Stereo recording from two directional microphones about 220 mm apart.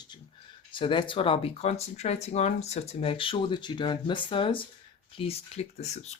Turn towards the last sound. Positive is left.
turn(degrees=30)  # may be behind; listen again after turning